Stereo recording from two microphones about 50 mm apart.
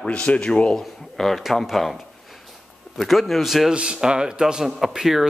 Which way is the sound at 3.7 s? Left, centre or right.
Centre.